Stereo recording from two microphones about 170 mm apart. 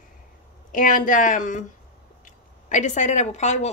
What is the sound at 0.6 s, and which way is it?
Speech, 50° left (ahead or behind).